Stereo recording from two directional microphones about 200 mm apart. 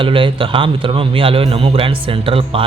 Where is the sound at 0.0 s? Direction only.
25° right (ahead or behind).